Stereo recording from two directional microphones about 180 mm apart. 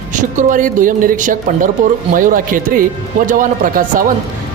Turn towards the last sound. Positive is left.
turn(degrees=-50)  # may be behind; listen again after turning